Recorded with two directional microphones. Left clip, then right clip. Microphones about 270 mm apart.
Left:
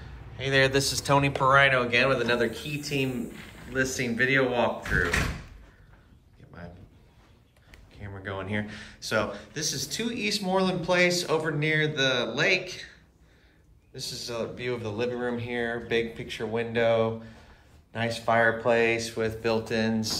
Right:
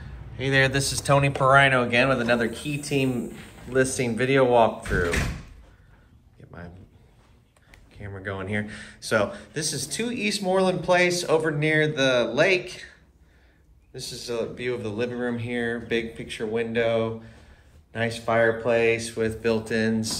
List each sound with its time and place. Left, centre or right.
0.0 s speech: centre
6.4 s a sound: centre
7.9 s speech: centre
13.9 s speech: centre